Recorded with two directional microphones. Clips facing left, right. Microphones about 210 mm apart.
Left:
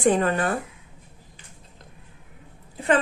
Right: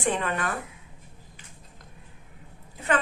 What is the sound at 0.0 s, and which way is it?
Speech, 40° left (ahead or behind).